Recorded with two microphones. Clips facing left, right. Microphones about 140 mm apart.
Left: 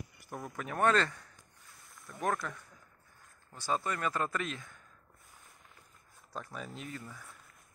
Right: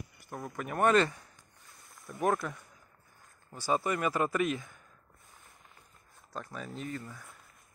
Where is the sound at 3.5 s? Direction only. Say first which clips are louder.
Right 4 dB; 10° right (ahead or behind).